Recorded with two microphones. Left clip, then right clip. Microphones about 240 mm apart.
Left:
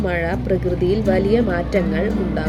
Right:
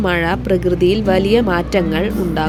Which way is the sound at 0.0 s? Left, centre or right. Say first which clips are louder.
Right 5 dB; right.